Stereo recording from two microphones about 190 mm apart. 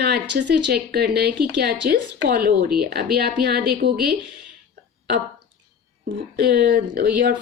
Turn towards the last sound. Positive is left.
turn(degrees=-50)  # may be behind; listen again after turning